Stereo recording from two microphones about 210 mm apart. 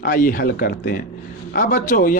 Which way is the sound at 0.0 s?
40° left (ahead or behind).